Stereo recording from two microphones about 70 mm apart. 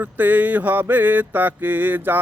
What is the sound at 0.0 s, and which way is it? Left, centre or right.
Mantra, right.